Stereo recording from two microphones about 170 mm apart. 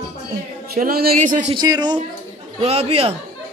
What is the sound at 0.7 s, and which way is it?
Speech, 60° right (ahead or behind).